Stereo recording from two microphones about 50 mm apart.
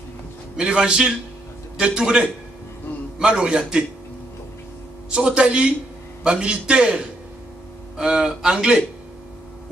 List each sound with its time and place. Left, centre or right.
0.6 s speech: centre
5.1 s a man's voice: centre
8.1 s speech: centre